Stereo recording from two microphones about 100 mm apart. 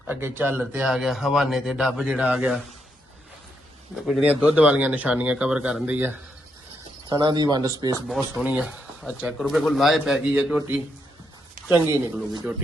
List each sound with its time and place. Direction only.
0.1 s speech: 20° right (ahead or behind)
0.9 s speech: centre (ahead or behind)
4.3 s speech: 15° right (ahead or behind)
7.1 s speech: 45° right (ahead or behind)
8.0 s speech: 5° right (ahead or behind); by 12.2 s 20° right (ahead or behind)